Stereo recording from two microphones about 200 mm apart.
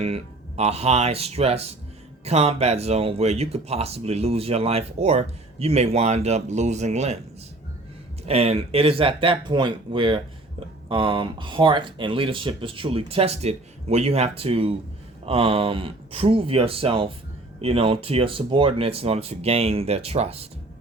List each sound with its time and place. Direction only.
0.0 s speech: 30° right (ahead or behind)
8.3 s speech: 30° right (ahead or behind)